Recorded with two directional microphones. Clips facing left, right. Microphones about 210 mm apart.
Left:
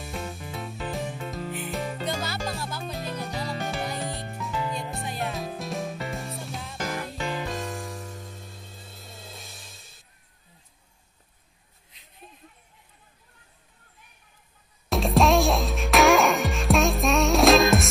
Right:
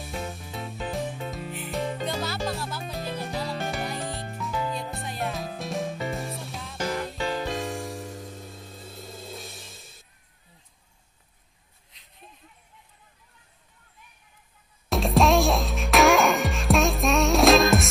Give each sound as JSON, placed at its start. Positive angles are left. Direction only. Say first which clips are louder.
{"t": 0.0, "sound": "music", "louder": "even", "side_deg": 0}
{"t": 14.9, "sound": "music", "louder": "even", "side_deg": 0}